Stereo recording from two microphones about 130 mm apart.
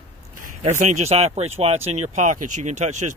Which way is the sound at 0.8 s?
60° right (ahead or behind).